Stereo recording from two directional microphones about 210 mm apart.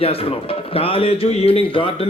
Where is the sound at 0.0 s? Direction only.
25° left (ahead or behind).